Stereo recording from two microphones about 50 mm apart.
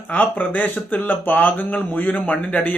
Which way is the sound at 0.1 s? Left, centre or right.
Left.